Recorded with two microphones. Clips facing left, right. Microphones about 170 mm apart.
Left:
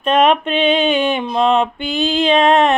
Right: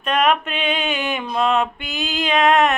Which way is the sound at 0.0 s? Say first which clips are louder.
Left 5 dB; 25° left (ahead or behind).